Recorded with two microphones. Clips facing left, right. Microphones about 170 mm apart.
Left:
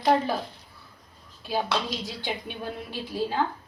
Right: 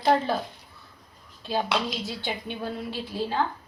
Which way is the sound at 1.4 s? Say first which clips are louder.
Right 1 dB; 10° left (ahead or behind).